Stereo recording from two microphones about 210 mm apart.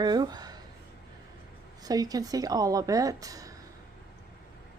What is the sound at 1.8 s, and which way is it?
Speech, 20° right (ahead or behind).